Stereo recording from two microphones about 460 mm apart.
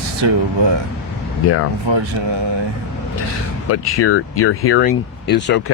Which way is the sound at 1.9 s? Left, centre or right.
Right.